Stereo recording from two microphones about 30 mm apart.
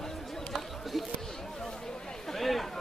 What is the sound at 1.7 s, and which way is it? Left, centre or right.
Chatter, centre.